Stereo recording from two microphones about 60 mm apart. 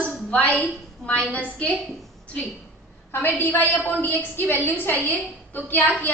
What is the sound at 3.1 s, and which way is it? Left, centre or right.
A woman's voice, left.